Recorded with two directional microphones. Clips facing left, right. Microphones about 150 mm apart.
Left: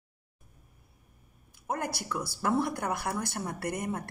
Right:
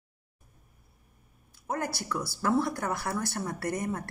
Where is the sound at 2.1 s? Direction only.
15° left (ahead or behind).